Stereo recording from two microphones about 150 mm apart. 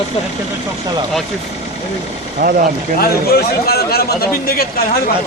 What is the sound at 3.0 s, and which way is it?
A man's voice, 90° left.